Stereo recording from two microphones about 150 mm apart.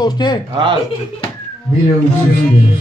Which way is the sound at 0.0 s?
25° left (ahead or behind).